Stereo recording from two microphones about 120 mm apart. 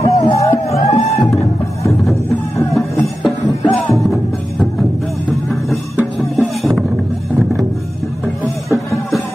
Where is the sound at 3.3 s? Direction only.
Centre (ahead or behind).